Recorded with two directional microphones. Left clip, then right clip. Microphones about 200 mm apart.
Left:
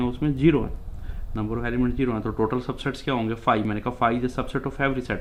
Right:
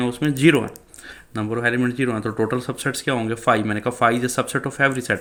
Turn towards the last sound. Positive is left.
turn(degrees=-20)  # may be behind; listen again after turning